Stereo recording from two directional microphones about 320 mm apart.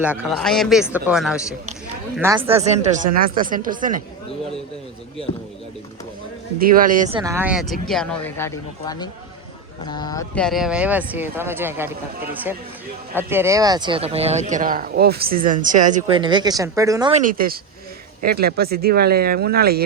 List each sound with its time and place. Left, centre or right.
0.0 s speech: centre; by 4.0 s right
6.6 s speech: right
7.2 s speech: centre
13.1 s speech: centre
17.2 s speech: right